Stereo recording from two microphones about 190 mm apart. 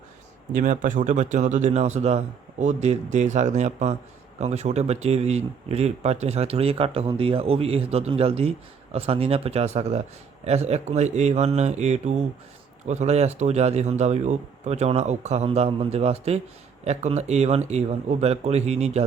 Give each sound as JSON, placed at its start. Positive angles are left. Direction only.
{"t": 0.5, "sound": "speech", "side_deg": -45}